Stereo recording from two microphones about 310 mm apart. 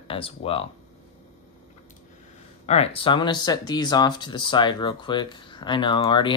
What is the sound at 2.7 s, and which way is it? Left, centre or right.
Speech, centre.